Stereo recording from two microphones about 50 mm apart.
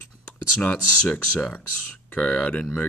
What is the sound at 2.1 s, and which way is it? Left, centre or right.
Speech, left.